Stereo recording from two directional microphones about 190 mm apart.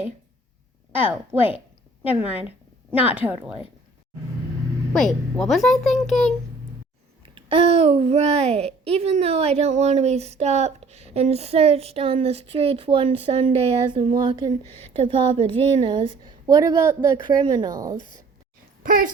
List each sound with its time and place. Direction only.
0.9 s a woman's voice: 10° right (ahead or behind)
3.2 s speech: 5° right (ahead or behind)
4.9 s speech: centre (ahead or behind)
7.3 s a child's voice: 30° right (ahead or behind)
18.8 s speech: 45° right (ahead or behind)